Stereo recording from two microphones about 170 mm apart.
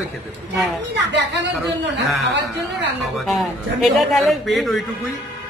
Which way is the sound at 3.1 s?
Centre (ahead or behind).